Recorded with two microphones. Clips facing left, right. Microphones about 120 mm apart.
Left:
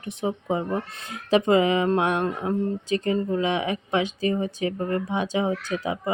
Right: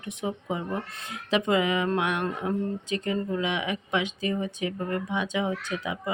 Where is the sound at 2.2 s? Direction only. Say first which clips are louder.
Left 3 dB; 20° left (ahead or behind).